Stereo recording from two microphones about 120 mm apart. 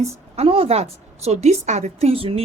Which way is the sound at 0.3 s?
55° right (ahead or behind).